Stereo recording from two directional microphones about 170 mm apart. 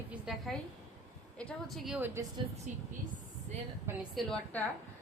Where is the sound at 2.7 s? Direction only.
45° right (ahead or behind).